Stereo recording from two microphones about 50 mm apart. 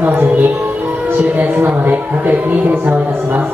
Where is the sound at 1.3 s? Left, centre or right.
Right.